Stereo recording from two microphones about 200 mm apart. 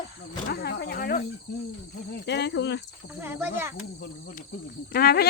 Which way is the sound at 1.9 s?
50° left (ahead or behind).